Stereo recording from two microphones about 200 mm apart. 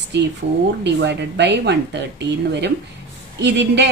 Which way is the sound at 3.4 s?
60° right (ahead or behind).